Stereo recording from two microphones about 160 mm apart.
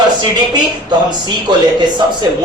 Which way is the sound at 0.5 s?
25° right (ahead or behind).